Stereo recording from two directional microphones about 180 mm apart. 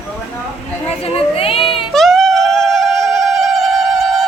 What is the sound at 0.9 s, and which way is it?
Speech, 35° left (ahead or behind).